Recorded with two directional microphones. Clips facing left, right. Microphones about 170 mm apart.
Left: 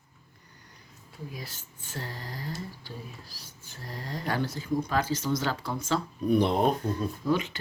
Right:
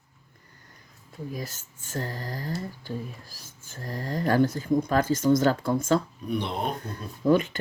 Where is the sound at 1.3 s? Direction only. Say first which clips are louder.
Right 6 dB; 45° right (ahead or behind).